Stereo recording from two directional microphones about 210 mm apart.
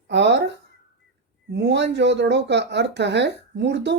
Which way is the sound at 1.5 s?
55° right (ahead or behind).